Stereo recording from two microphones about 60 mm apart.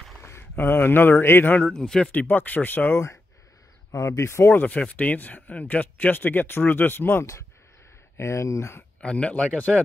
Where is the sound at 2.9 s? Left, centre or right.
Left.